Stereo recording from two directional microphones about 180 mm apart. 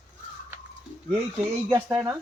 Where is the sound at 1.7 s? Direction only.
15° right (ahead or behind).